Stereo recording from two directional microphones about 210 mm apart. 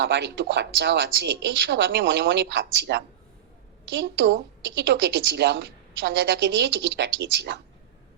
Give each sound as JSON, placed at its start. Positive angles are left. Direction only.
{"t": 0.0, "sound": "speech", "side_deg": -55}